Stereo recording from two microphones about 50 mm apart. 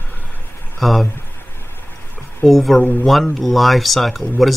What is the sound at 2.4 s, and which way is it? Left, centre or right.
Speech, centre.